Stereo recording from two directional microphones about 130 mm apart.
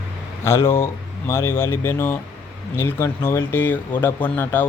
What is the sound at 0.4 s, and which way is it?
Speech, 20° left (ahead or behind).